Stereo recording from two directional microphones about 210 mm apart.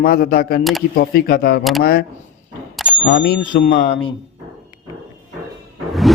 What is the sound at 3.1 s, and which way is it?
Speech, 60° left (ahead or behind).